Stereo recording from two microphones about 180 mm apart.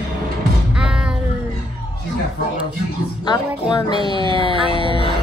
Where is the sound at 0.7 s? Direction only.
5° right (ahead or behind).